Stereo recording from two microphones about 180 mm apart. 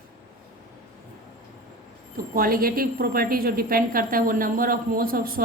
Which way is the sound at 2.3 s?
55° right (ahead or behind).